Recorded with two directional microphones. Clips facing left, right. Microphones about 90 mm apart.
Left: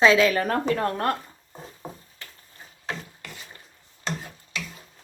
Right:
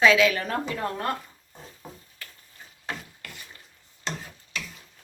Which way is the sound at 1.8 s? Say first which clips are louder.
Left 5 dB; 35° left (ahead or behind).